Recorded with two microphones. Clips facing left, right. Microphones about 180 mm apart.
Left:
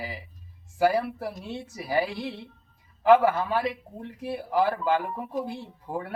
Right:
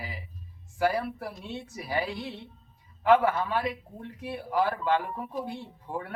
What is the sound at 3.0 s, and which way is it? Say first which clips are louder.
A man's voice: left 3 dB; 30° left (ahead or behind).